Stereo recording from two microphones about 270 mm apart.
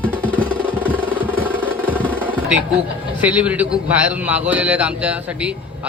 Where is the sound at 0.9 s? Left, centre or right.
Centre.